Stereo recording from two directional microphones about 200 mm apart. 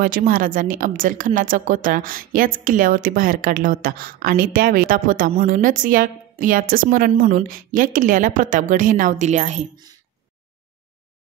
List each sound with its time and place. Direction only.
0.3 s a woman's voice: 45° right (ahead or behind)